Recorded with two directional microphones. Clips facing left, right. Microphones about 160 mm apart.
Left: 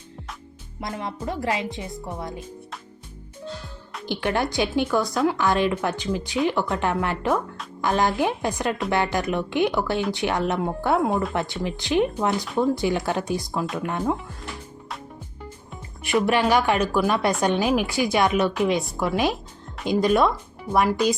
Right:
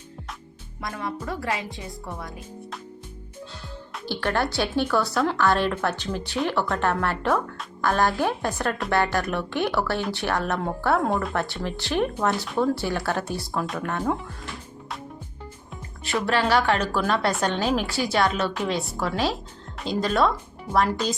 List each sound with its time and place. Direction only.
0.8 s speech: 20° left (ahead or behind)
4.1 s speech: 15° left (ahead or behind)
11.1 s speech: 5° left (ahead or behind)
11.3 s speech: 15° left (ahead or behind)
16.2 s speech: 15° left (ahead or behind)